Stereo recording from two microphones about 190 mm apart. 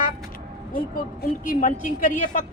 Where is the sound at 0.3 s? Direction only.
50° left (ahead or behind).